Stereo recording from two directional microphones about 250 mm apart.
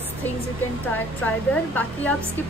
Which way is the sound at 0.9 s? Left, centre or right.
Centre.